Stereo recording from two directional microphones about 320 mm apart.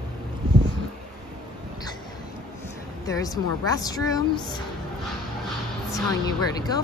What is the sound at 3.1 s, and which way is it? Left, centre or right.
Speech, centre.